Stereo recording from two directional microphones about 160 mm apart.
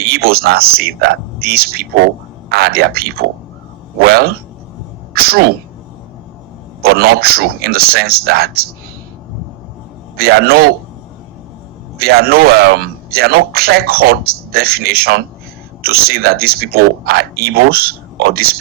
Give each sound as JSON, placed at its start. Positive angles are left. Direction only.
{"t": 0.0, "sound": "a man's voice", "side_deg": -75}
{"t": 5.1, "sound": "a sound", "side_deg": -75}
{"t": 6.8, "sound": "a man's voice", "side_deg": -75}
{"t": 10.2, "sound": "a man's voice", "side_deg": -75}
{"t": 11.9, "sound": "a man's voice", "side_deg": -75}